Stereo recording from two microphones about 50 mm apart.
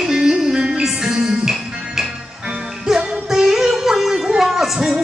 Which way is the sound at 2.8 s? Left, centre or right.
Centre.